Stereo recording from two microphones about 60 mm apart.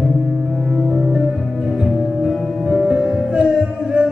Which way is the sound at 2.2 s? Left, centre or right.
Centre.